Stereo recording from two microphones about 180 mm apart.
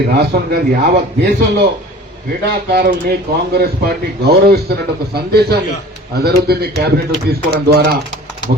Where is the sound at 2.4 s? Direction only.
60° right (ahead or behind).